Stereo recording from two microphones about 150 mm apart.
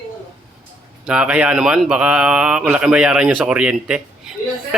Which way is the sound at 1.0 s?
5° right (ahead or behind).